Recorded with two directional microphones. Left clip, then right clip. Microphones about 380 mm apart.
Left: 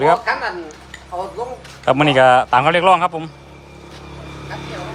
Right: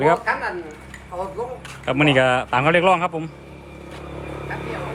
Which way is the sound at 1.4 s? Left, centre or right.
Left.